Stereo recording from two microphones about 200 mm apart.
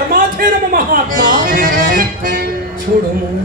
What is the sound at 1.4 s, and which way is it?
Music, 45° right (ahead or behind).